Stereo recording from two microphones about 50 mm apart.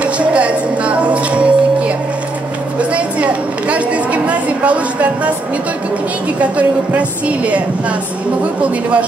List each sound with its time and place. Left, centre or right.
0.0 s music: right
2.9 s a sound: right
6.4 s a woman's voice: right